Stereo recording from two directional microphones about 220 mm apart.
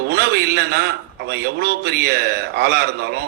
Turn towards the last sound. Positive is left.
turn(degrees=-50)  # may be behind; listen again after turning